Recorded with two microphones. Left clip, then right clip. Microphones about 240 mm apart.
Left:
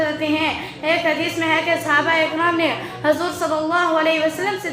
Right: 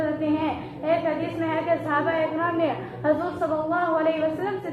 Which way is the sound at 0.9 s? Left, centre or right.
Left.